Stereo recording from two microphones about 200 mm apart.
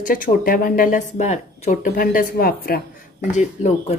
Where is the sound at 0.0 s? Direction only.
45° left (ahead or behind).